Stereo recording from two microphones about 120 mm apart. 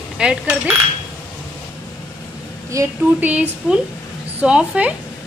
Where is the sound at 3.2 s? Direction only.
15° right (ahead or behind).